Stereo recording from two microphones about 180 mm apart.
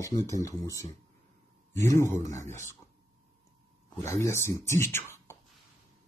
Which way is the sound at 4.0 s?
15° left (ahead or behind).